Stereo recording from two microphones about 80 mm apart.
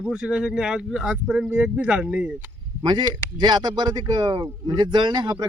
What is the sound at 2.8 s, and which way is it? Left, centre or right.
Speech, right.